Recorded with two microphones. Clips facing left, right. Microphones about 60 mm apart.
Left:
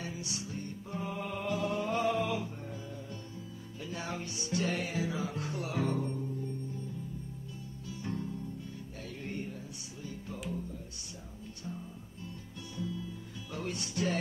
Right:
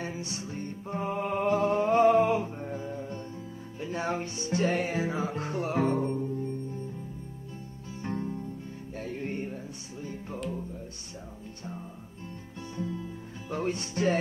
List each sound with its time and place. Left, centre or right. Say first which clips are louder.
0.0 s music: right 4 dB; right
7.9 s music: right 5 dB; right
12.7 s music: right 3 dB; right